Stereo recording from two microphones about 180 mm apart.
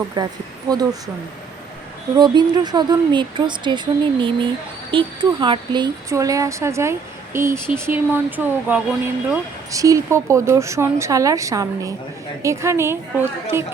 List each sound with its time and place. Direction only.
0.2 s speech: 20° right (ahead or behind)
2.1 s speech: 25° right (ahead or behind)